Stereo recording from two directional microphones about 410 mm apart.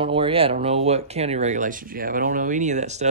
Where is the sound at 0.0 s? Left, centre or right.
Centre.